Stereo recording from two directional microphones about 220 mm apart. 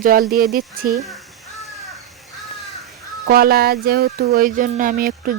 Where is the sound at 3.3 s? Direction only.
45° right (ahead or behind).